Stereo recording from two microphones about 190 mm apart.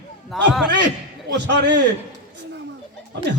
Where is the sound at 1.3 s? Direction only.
65° right (ahead or behind).